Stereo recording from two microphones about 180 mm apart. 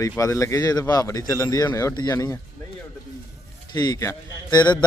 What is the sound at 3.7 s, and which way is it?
Speech, 25° left (ahead or behind).